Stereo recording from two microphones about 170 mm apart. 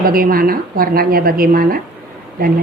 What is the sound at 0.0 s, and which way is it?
A woman's voice, 60° right (ahead or behind).